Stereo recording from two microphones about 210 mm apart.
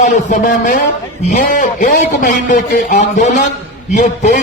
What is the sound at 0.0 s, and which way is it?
A man's voice, 35° left (ahead or behind).